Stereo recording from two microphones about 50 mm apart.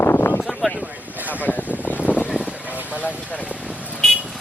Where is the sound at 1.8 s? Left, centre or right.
Left.